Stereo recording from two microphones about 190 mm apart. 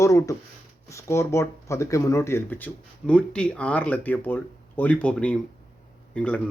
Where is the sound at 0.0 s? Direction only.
15° left (ahead or behind).